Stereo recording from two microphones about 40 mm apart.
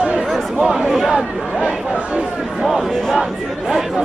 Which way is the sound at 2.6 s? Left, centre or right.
Centre.